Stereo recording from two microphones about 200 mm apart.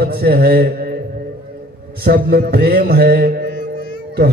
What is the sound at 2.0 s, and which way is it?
Mantra, 50° right (ahead or behind).